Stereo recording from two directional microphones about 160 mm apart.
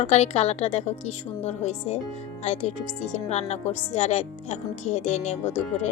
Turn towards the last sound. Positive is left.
turn(degrees=45)  # may be behind; listen again after turning